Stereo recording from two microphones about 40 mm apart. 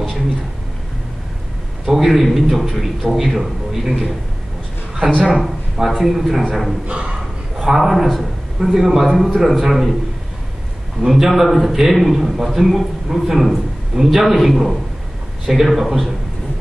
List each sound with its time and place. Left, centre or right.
1.9 s a man's voice: centre
5.2 s a man's voice: centre
6.9 s a sound: right
7.5 s a man's voice: centre
11.0 s a man's voice: centre